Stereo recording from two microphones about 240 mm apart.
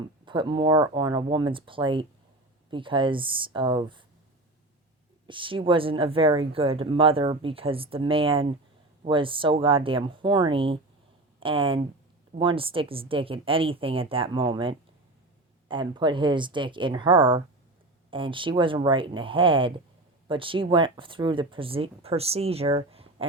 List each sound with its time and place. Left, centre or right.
0.3 s speech: centre
5.3 s speech: right